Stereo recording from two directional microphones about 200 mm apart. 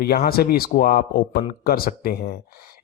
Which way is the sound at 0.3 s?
50° left (ahead or behind).